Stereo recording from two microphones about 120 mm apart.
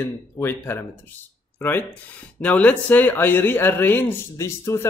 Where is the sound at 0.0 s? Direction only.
20° left (ahead or behind).